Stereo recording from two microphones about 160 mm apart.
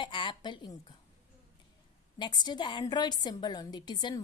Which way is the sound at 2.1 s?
25° left (ahead or behind).